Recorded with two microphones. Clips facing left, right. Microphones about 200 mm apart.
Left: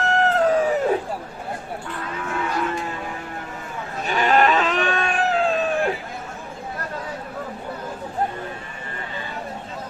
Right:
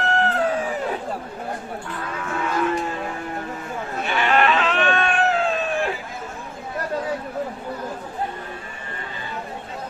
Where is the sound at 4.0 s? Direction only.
40° left (ahead or behind).